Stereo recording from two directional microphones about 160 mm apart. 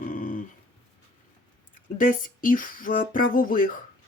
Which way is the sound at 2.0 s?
60° left (ahead or behind).